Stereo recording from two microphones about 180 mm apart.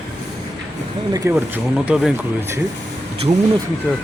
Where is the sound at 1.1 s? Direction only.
15° right (ahead or behind).